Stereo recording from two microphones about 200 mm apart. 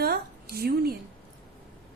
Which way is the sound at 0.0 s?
50° right (ahead or behind).